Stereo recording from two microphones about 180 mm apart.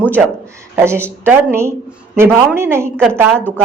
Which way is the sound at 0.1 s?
15° right (ahead or behind).